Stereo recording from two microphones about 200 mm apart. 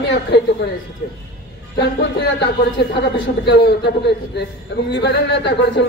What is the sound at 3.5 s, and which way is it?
A man's voice, 55° left (ahead or behind).